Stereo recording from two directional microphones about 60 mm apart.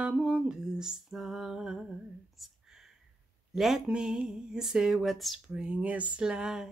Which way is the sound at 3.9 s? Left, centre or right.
Centre.